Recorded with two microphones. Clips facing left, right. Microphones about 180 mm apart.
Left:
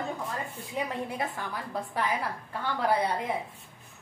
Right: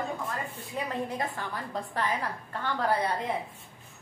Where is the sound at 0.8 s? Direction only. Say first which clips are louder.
Even; 15° left (ahead or behind).